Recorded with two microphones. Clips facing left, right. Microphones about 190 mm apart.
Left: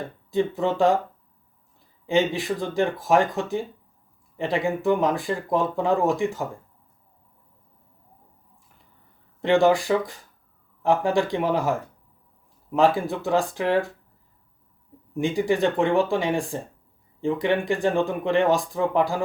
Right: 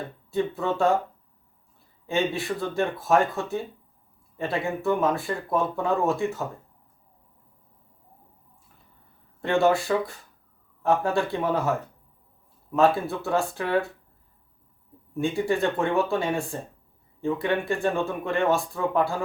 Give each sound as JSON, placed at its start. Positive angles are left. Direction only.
{"t": 0.3, "sound": "speech", "side_deg": 15}
{"t": 2.0, "sound": "speech", "side_deg": 15}
{"t": 9.4, "sound": "speech", "side_deg": 15}
{"t": 12.7, "sound": "speech", "side_deg": 15}
{"t": 15.1, "sound": "speech", "side_deg": 15}